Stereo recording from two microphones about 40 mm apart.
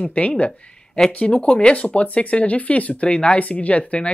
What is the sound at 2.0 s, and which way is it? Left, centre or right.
Speech, left.